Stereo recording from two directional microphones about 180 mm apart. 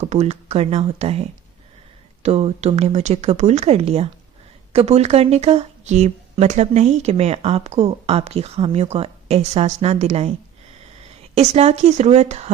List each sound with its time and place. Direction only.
0.0 s speech: 40° right (ahead or behind)
2.2 s speech: 35° right (ahead or behind)
11.3 s speech: 35° right (ahead or behind)